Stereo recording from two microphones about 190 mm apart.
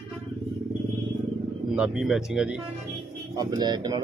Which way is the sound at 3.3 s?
20° right (ahead or behind).